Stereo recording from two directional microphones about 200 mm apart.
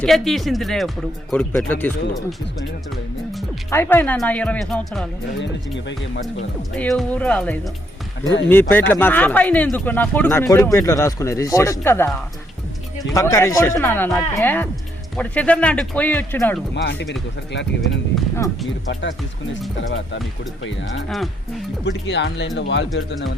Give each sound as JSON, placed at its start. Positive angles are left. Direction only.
{"t": 0.0, "sound": "speech", "side_deg": 0}
{"t": 3.7, "sound": "speech", "side_deg": 10}
{"t": 6.7, "sound": "speech", "side_deg": 5}
{"t": 8.2, "sound": "speech", "side_deg": 65}
{"t": 8.7, "sound": "speech", "side_deg": 10}
{"t": 16.7, "sound": "speech", "side_deg": 60}
{"t": 20.6, "sound": "speech", "side_deg": 65}
{"t": 21.1, "sound": "speech", "side_deg": 0}
{"t": 21.8, "sound": "speech", "side_deg": 60}